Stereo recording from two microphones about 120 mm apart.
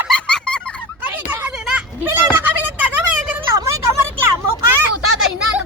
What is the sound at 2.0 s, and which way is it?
Goat, 20° right (ahead or behind).